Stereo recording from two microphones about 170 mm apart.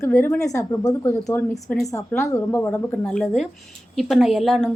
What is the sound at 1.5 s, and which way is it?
Speech, centre (ahead or behind).